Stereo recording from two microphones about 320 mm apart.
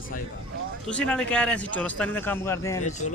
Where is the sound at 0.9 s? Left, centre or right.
Centre.